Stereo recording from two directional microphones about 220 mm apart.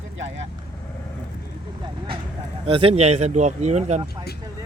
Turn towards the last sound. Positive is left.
turn(degrees=-30)  # may be behind; listen again after turning